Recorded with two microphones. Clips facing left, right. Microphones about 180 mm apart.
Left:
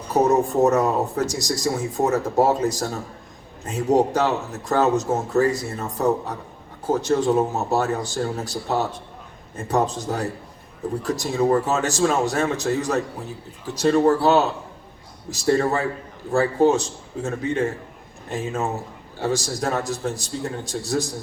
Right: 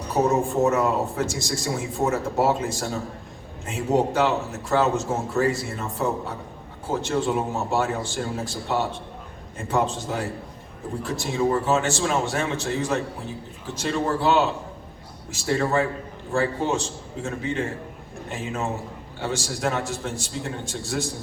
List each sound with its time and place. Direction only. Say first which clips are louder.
0.1 s speech: left 3 dB; 40° left (ahead or behind)